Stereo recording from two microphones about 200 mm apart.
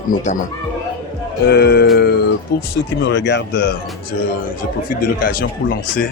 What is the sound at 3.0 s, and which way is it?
Speech, 60° left (ahead or behind).